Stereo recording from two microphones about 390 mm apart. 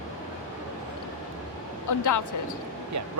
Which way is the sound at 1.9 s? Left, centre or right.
Left.